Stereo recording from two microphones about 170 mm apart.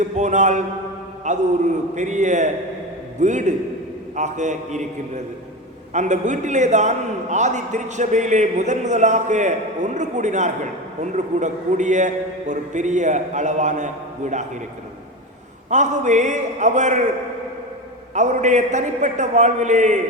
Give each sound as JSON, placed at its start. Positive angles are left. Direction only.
{"t": 0.0, "sound": "a man's voice", "side_deg": -45}
{"t": 15.7, "sound": "a man's voice", "side_deg": -45}
{"t": 18.1, "sound": "a man's voice", "side_deg": -45}